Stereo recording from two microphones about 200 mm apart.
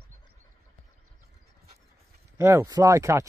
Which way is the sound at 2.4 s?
15° right (ahead or behind).